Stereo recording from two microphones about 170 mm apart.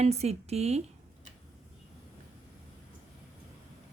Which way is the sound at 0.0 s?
40° right (ahead or behind).